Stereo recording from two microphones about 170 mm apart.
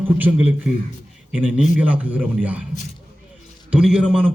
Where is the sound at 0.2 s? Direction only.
10° right (ahead or behind).